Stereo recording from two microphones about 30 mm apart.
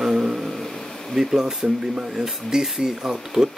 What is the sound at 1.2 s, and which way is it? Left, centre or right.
Speech, centre.